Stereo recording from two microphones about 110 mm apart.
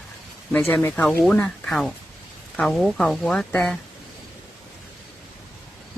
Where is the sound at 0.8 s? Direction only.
15° left (ahead or behind).